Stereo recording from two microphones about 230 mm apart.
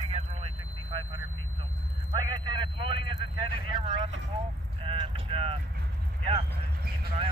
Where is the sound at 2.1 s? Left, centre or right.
Centre.